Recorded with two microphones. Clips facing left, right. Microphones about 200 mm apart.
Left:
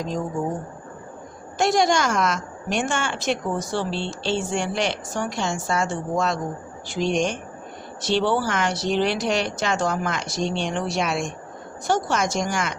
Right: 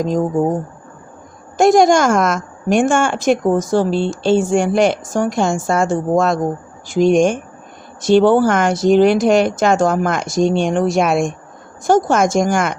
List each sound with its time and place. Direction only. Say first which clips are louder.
0.0 s a woman's voice: right 10 dB; 45° right (ahead or behind)
1.5 s a woman's voice: right 9 dB; 50° right (ahead or behind)